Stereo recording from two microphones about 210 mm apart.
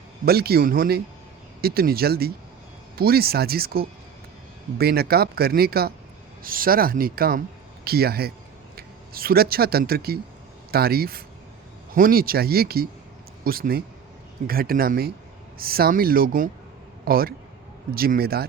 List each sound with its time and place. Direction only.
0.3 s speech: 50° right (ahead or behind)